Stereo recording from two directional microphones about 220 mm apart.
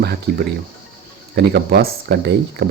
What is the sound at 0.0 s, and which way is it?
Speech, 45° right (ahead or behind).